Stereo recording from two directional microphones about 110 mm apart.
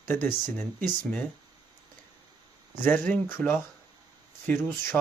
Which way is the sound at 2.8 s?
15° left (ahead or behind).